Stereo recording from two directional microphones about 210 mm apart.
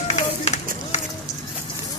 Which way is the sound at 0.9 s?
30° left (ahead or behind).